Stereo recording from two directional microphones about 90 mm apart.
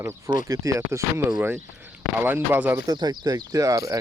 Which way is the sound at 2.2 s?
20° right (ahead or behind).